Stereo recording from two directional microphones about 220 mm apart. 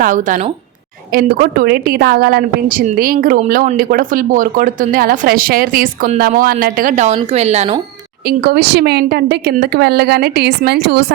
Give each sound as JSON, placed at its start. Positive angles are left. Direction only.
{"t": 0.0, "sound": "a woman's voice", "side_deg": -35}
{"t": 8.3, "sound": "a woman's voice", "side_deg": -45}